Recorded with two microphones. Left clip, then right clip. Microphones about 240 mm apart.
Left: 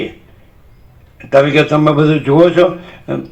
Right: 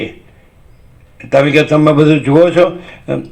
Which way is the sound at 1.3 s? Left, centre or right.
Right.